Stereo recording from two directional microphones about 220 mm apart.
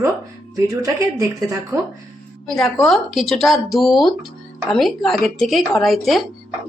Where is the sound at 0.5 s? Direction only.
15° right (ahead or behind).